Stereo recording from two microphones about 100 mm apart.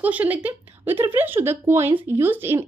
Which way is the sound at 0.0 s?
15° right (ahead or behind).